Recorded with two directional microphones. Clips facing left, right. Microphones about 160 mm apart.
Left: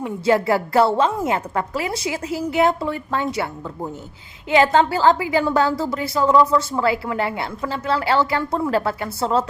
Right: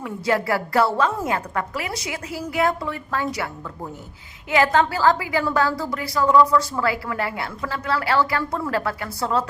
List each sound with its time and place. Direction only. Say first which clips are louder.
0.0 s a woman's voice: left 4 dB; 25° left (ahead or behind)